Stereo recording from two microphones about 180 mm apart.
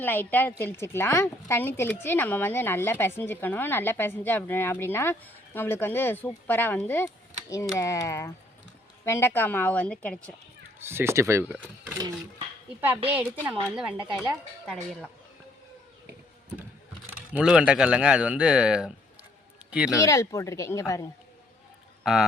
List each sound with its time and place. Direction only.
0.0 s speech: 10° left (ahead or behind)
10.8 s speech: 15° right (ahead or behind)
13.4 s speech: 10° right (ahead or behind)
17.3 s speech: 5° right (ahead or behind)
20.0 s speech: 15° left (ahead or behind)
22.0 s speech: 5° right (ahead or behind)